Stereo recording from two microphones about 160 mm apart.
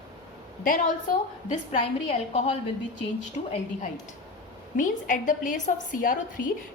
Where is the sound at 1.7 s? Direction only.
40° left (ahead or behind).